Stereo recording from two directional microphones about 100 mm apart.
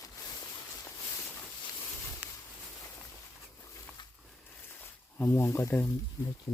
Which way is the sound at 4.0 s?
50° left (ahead or behind).